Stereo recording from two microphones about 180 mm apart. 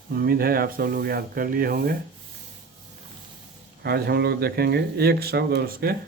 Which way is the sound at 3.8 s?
65° right (ahead or behind).